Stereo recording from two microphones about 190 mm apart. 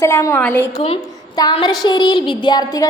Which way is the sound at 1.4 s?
20° left (ahead or behind).